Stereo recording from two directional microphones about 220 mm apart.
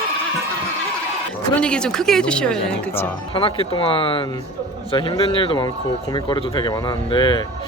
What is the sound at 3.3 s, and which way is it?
Speech, 25° left (ahead or behind).